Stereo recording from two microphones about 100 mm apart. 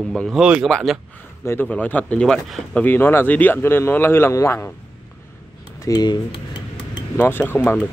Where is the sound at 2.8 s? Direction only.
20° left (ahead or behind).